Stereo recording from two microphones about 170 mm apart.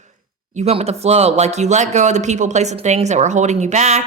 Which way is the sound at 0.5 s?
35° right (ahead or behind).